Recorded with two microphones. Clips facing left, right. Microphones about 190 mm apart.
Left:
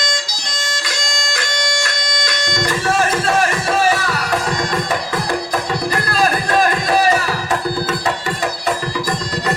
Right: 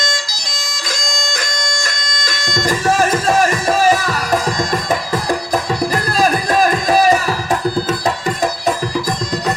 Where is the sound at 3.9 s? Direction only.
20° right (ahead or behind).